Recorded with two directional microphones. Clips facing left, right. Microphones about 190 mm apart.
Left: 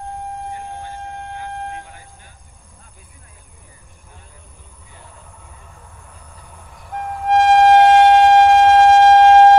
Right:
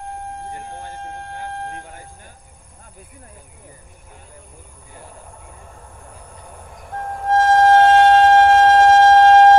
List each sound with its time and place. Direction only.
0.8 s siren: 50° right (ahead or behind)
7.2 s wind instrument: 15° left (ahead or behind)